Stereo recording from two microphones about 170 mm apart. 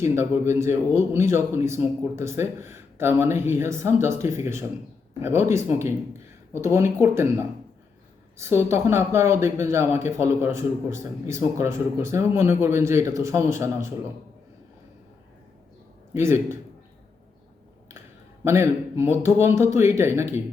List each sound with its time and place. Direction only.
0.0 s speech: 15° right (ahead or behind)
8.4 s speech: 15° right (ahead or behind)
16.1 s speech: 15° right (ahead or behind)
18.4 s speech: 15° right (ahead or behind)